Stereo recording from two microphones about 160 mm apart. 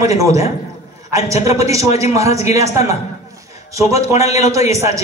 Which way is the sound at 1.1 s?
20° right (ahead or behind).